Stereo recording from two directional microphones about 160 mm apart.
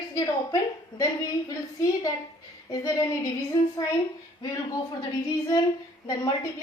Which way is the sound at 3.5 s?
25° left (ahead or behind).